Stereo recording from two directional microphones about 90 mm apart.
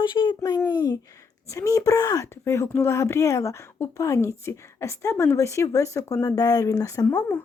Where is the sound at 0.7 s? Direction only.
50° left (ahead or behind).